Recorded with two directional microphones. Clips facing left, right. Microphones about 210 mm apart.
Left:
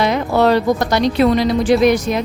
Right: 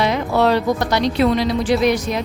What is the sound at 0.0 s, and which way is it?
A woman's voice, 45° left (ahead or behind).